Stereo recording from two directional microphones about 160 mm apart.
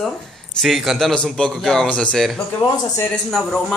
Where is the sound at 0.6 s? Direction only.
Centre (ahead or behind).